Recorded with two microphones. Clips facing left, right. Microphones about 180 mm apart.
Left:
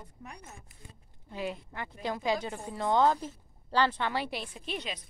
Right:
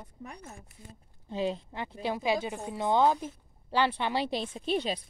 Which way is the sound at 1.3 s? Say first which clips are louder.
Right 5 dB; 25° right (ahead or behind).